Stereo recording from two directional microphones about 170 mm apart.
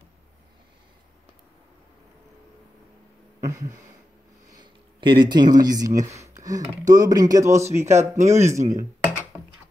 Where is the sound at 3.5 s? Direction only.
20° right (ahead or behind).